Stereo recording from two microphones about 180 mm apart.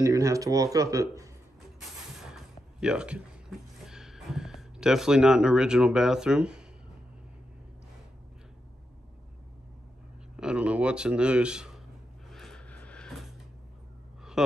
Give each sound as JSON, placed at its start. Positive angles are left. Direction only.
{"t": 0.0, "sound": "speech", "side_deg": -15}
{"t": 1.8, "sound": "a sound", "side_deg": -5}
{"t": 10.3, "sound": "speech", "side_deg": -5}
{"t": 12.3, "sound": "music", "side_deg": 0}